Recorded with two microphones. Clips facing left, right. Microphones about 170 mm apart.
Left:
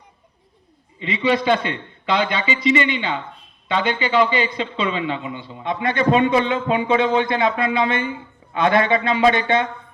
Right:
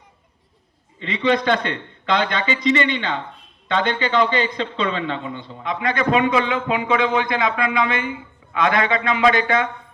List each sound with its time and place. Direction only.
0.9 s a man's voice: 10° left (ahead or behind)
5.6 s a man's voice: 30° left (ahead or behind)